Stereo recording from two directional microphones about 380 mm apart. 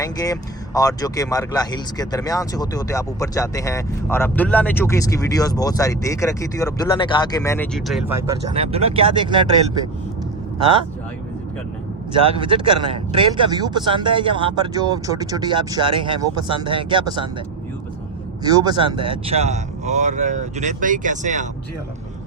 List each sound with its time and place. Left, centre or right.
0.0 s speech: centre
10.6 s speech: centre
12.4 s speech: centre
18.4 s speech: centre